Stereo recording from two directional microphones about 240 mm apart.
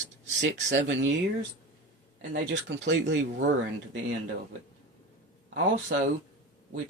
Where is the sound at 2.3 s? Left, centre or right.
Right.